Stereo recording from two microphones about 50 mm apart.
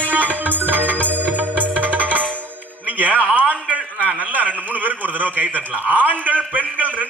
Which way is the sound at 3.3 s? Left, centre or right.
Right.